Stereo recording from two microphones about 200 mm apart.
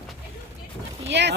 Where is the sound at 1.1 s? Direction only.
60° right (ahead or behind).